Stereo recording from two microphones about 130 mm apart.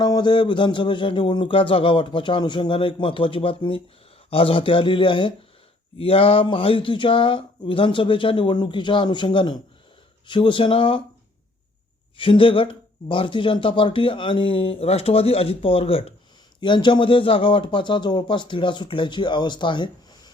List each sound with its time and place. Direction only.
0.0 s a man's voice: 35° left (ahead or behind)
12.1 s a man's voice: 40° left (ahead or behind)